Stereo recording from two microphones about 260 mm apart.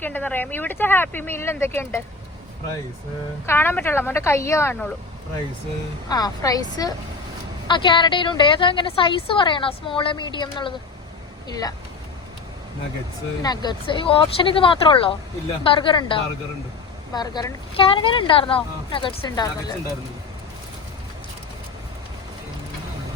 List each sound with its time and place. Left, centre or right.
0.0 s speech: centre
3.4 s speech: centre
6.1 s a woman's voice: centre
13.4 s a woman's voice: centre